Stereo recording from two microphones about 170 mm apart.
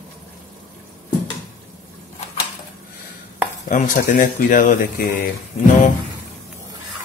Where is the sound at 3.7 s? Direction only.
50° left (ahead or behind).